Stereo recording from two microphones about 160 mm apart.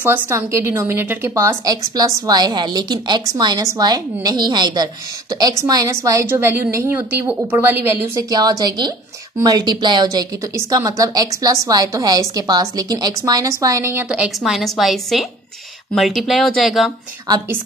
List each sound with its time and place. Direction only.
0.0 s a woman's voice: 10° right (ahead or behind)
14.0 s a woman's voice: 5° right (ahead or behind)